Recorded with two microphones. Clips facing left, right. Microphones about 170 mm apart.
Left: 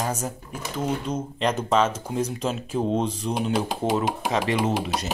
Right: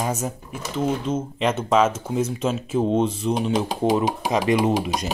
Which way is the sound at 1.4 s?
5° right (ahead or behind).